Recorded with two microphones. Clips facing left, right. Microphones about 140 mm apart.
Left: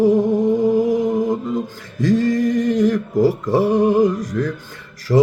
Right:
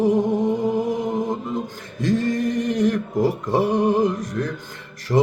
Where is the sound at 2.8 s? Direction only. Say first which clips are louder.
Left 3 dB; 20° right (ahead or behind).